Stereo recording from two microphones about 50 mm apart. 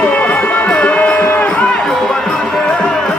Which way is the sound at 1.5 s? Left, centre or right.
Centre.